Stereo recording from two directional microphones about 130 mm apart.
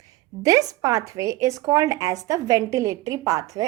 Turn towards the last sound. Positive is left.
turn(degrees=-25)  # may be behind; listen again after turning